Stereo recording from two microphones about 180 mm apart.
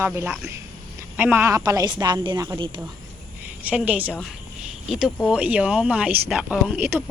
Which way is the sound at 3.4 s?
10° right (ahead or behind).